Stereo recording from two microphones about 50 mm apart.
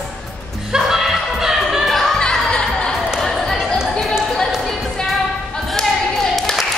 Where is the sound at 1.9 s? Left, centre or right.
Centre.